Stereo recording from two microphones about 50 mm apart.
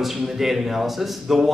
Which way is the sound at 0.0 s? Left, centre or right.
Centre.